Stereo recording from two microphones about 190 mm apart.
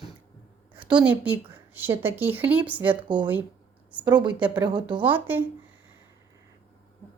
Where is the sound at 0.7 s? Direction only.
5° right (ahead or behind).